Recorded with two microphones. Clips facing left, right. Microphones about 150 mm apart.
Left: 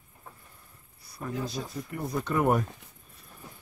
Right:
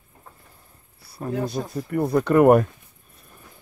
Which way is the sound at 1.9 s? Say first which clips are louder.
Right 13 dB; 65° right (ahead or behind).